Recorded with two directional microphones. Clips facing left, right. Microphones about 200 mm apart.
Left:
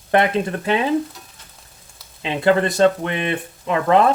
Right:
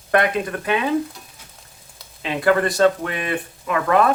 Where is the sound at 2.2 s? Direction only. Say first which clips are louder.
Left 1 dB; 25° left (ahead or behind).